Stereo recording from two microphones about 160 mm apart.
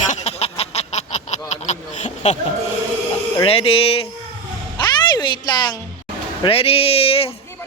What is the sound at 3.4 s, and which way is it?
Speech, 35° left (ahead or behind).